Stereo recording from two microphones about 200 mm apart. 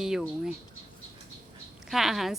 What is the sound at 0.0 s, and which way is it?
Speech, centre (ahead or behind).